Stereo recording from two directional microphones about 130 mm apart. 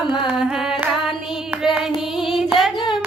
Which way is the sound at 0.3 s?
10° right (ahead or behind).